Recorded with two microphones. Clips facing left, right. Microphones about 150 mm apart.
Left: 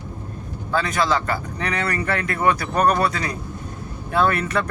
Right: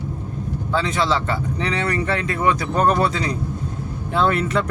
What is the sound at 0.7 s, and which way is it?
Speech, 20° right (ahead or behind).